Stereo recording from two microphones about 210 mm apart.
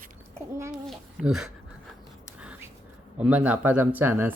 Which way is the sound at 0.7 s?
Centre (ahead or behind).